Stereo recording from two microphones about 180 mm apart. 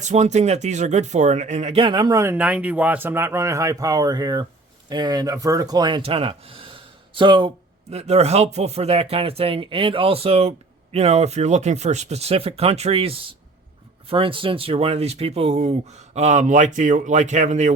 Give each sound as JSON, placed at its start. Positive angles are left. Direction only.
{"t": 0.0, "sound": "speech", "side_deg": -40}